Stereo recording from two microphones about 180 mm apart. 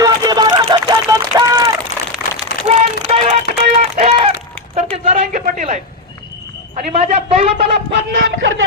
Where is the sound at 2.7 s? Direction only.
35° right (ahead or behind).